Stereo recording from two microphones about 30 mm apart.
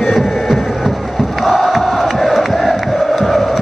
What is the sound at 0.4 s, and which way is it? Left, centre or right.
Chant, centre.